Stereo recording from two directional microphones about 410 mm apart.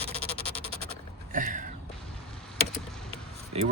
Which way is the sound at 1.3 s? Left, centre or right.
Centre.